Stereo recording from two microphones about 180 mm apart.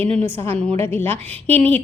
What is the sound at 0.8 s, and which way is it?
Speech, 10° left (ahead or behind).